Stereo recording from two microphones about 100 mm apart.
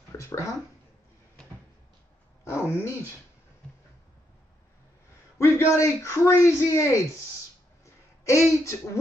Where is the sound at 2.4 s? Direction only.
25° left (ahead or behind).